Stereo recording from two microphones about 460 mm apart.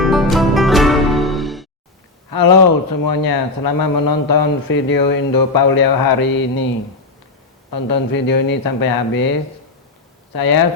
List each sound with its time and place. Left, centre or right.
0.0 s music: centre
2.3 s speech: left
7.7 s speech: left
10.3 s speech: left